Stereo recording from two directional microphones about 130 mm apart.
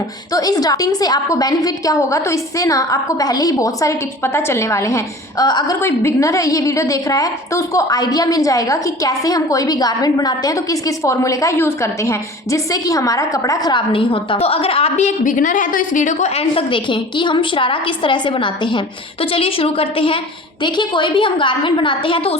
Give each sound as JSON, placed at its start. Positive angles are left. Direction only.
{"t": 0.3, "sound": "a woman's voice", "side_deg": 30}
{"t": 5.8, "sound": "a woman's voice", "side_deg": 20}
{"t": 13.7, "sound": "a woman's voice", "side_deg": 40}